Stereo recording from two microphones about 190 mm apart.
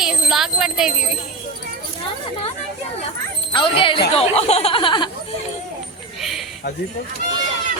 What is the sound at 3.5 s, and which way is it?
Speech, 25° left (ahead or behind).